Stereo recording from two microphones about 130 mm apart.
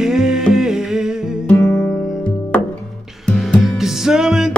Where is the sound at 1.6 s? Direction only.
15° left (ahead or behind).